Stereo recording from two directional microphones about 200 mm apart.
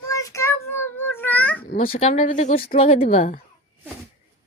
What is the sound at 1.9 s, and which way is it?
Speech, 35° left (ahead or behind).